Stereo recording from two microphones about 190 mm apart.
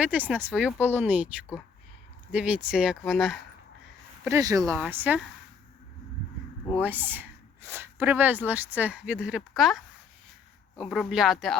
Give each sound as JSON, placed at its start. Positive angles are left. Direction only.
{"t": 0.0, "sound": "speech", "side_deg": -10}
{"t": 2.3, "sound": "speech", "side_deg": -5}
{"t": 4.3, "sound": "speech", "side_deg": -15}
{"t": 6.8, "sound": "speech", "side_deg": -10}